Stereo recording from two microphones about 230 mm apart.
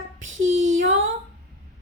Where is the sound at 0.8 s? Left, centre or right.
Right.